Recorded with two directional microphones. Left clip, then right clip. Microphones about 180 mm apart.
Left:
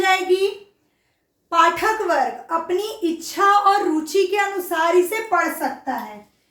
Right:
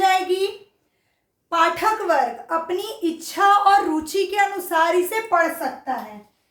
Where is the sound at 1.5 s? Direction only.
15° right (ahead or behind).